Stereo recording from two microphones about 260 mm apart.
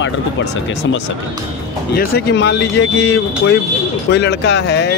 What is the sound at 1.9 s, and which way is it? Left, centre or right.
A man's voice, left.